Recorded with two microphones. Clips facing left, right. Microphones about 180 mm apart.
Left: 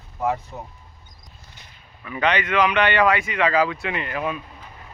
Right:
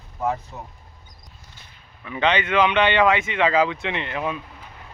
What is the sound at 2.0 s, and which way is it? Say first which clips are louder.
Speech: right 1 dB; 20° right (ahead or behind).